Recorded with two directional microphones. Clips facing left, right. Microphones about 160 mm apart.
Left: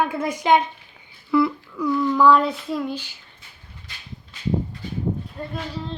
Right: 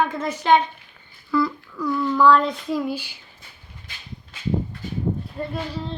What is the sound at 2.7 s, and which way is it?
Speech, 5° right (ahead or behind).